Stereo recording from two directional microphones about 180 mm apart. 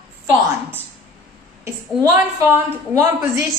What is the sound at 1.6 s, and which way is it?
A woman's voice, 15° right (ahead or behind).